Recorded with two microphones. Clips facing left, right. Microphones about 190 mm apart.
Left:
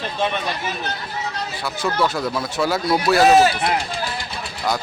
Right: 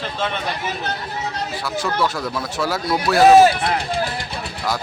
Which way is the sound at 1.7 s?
Centre (ahead or behind).